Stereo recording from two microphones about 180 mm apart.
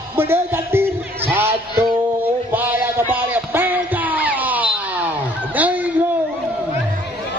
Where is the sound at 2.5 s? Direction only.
10° right (ahead or behind).